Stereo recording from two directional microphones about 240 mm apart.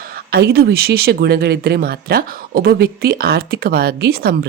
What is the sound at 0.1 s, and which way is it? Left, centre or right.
Speech, right.